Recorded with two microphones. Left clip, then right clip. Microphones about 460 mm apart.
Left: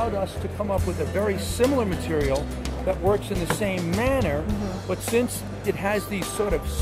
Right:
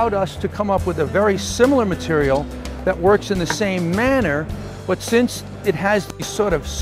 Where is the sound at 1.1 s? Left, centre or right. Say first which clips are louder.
Right 8 dB; right.